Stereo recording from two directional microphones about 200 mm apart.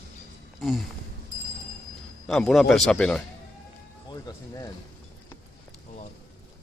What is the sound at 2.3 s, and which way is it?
Speech, centre (ahead or behind).